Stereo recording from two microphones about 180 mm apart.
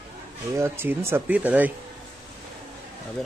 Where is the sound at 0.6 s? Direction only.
15° right (ahead or behind).